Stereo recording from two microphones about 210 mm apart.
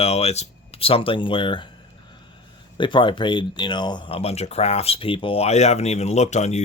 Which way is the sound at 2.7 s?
25° left (ahead or behind).